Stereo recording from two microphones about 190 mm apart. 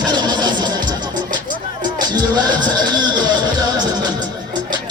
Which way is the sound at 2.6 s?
25° right (ahead or behind).